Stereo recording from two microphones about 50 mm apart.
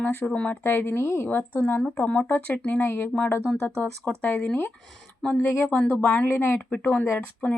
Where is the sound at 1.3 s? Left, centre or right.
Left.